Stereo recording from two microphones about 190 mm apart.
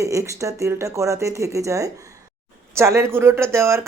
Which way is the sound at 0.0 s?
15° right (ahead or behind).